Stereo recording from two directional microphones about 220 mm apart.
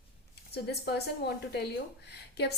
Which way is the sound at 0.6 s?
50° left (ahead or behind).